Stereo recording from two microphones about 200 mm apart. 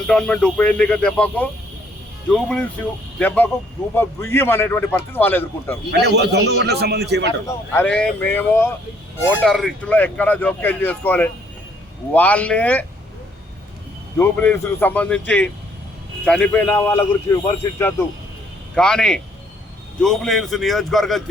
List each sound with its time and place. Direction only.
0.1 s speech: 5° left (ahead or behind)
5.9 s a man's voice: 55° right (ahead or behind)
7.4 s speech: 10° left (ahead or behind)
14.2 s speech: 10° left (ahead or behind)